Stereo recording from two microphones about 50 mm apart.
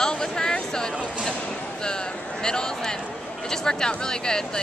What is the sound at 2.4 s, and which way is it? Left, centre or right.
Speech, centre.